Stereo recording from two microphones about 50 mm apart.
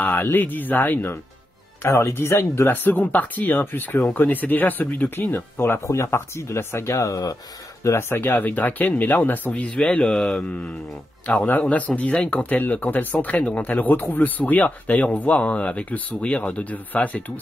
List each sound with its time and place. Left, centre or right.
0.0 s speech: left
1.9 s speech: left
2.1 s speech: left
2.6 s speech: left
5.9 s speech: left
7.8 s speech: left
9.5 s speech: left
10.0 s speech: centre
11.2 s speech: left